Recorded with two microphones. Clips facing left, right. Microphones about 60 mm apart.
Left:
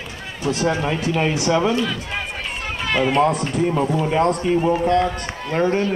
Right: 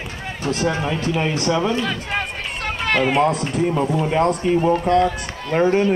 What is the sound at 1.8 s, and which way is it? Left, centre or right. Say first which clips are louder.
Speech: even; right.